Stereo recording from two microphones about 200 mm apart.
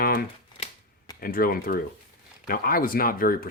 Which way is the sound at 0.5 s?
25° left (ahead or behind).